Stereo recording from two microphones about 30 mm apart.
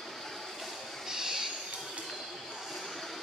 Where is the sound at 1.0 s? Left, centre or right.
Centre.